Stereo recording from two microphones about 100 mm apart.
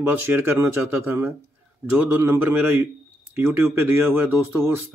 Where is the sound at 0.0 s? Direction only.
20° right (ahead or behind).